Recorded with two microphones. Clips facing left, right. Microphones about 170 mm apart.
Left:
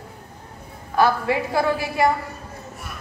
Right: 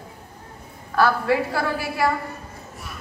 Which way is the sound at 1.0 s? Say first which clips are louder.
Even; 20° left (ahead or behind).